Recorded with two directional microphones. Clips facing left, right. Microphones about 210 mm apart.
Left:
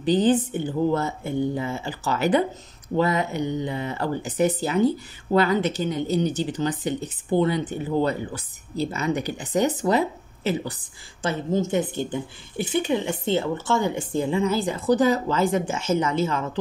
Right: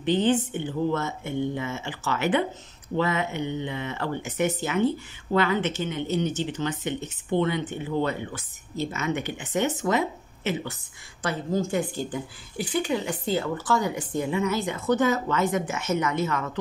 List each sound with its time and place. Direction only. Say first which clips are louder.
0.0 s speech: left 3 dB; 35° left (ahead or behind)
11.2 s speech: left 3 dB; 20° left (ahead or behind)